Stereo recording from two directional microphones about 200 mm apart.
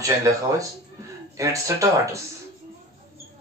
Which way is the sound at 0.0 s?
15° right (ahead or behind).